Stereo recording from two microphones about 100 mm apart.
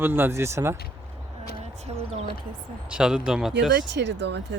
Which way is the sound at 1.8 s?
85° right.